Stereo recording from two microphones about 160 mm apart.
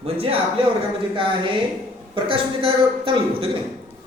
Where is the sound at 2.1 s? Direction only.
35° right (ahead or behind).